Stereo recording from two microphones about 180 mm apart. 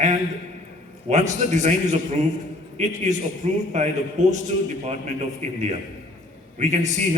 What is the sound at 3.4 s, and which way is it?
Speech, 40° right (ahead or behind).